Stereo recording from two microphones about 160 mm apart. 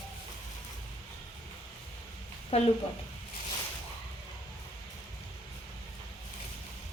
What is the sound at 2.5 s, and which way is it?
Speech, 40° left (ahead or behind).